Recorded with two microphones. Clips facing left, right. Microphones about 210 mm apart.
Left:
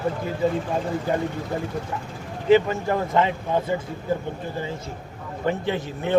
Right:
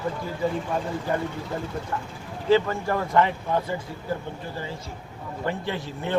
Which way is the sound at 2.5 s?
20° left (ahead or behind).